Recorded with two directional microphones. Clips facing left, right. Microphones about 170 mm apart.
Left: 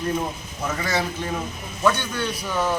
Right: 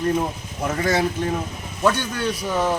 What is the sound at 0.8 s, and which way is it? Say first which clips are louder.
A man's voice: right 6 dB; 50° right (ahead or behind).